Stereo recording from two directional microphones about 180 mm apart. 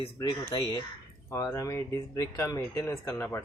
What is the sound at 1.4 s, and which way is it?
Speech, 15° left (ahead or behind).